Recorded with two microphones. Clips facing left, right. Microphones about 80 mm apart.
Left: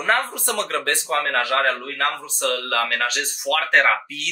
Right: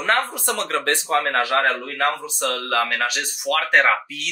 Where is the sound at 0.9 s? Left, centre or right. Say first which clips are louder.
Right 4 dB; right.